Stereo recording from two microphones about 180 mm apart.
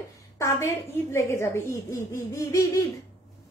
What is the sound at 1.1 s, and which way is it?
A woman's voice, 15° left (ahead or behind).